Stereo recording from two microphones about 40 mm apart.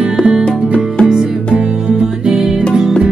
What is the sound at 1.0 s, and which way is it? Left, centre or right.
Music, centre.